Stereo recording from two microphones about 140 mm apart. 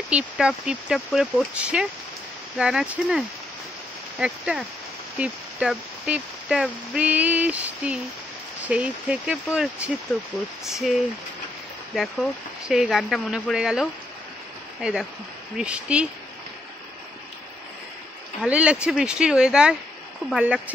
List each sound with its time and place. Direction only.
0.1 s speech: 5° right (ahead or behind)
10.1 s speech: 5° left (ahead or behind)
18.4 s speech: 10° right (ahead or behind)